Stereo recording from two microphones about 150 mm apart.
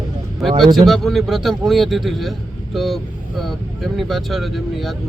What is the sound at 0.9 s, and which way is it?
A man's voice, centre (ahead or behind).